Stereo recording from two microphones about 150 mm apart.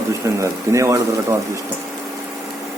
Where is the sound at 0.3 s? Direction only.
20° right (ahead or behind).